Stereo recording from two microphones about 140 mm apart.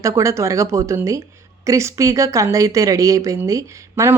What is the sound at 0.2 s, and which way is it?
Speech, 20° right (ahead or behind).